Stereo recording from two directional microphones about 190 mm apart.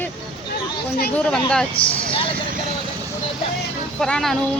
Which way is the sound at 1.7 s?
25° left (ahead or behind).